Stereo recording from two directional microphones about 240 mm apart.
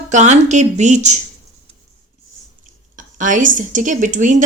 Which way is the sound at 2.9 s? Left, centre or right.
Right.